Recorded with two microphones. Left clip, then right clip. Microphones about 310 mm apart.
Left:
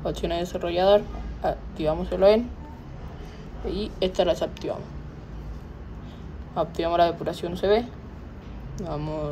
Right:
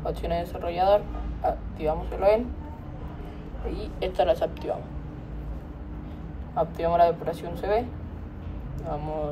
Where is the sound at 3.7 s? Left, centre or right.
Centre.